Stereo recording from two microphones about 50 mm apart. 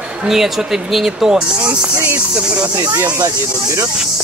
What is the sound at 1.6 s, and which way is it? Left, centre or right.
Speech, right.